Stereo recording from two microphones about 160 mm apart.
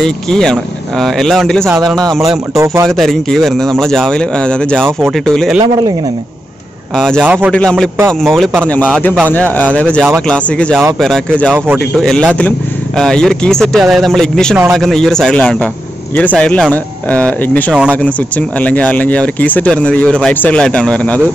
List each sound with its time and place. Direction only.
0.0 s speech: 5° left (ahead or behind)
2.5 s speech: 20° right (ahead or behind)
2.9 s speech: 5° left (ahead or behind)
7.0 s speech: centre (ahead or behind)
7.2 s speech: 10° right (ahead or behind)
7.5 s speech: 5° left (ahead or behind)
11.5 s speech: 10° right (ahead or behind)
12.0 s speech: 5° left (ahead or behind)